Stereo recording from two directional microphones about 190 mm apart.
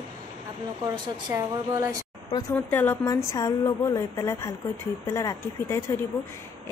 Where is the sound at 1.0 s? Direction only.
25° right (ahead or behind).